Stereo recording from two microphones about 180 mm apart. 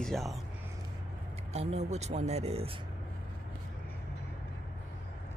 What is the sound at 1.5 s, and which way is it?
Speech, 40° right (ahead or behind).